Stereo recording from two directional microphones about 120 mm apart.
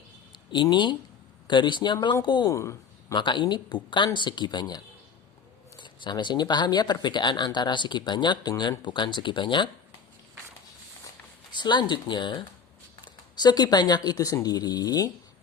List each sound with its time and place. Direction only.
0.5 s speech: 40° left (ahead or behind)
2.5 s speech: 25° left (ahead or behind)
3.2 s speech: 40° left (ahead or behind)
5.8 s speech: 40° left (ahead or behind)
11.5 s speech: 40° left (ahead or behind)